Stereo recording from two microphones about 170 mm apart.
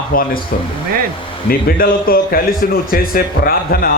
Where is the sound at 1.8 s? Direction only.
60° left (ahead or behind).